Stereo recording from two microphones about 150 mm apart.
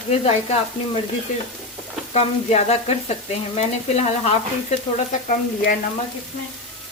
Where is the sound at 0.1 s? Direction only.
45° left (ahead or behind).